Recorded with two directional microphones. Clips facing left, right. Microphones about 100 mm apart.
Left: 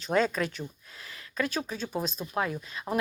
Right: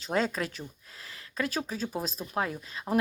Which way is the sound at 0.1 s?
30° right (ahead or behind).